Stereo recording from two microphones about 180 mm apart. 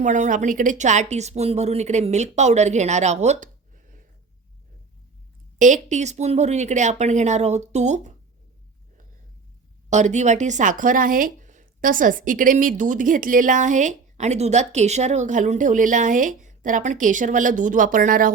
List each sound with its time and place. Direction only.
0.0 s a woman's voice: 45° right (ahead or behind)
5.5 s a woman's voice: 45° right (ahead or behind)
9.9 s speech: 40° right (ahead or behind)